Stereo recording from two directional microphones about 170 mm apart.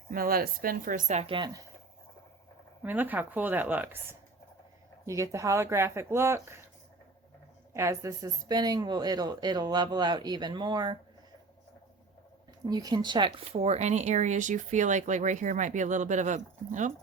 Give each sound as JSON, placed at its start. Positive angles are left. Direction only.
{"t": 0.1, "sound": "speech", "side_deg": -60}
{"t": 2.8, "sound": "a woman's voice", "side_deg": -10}
{"t": 7.7, "sound": "speech", "side_deg": -20}
{"t": 12.6, "sound": "speech", "side_deg": -25}
{"t": 13.5, "sound": "speech", "side_deg": -40}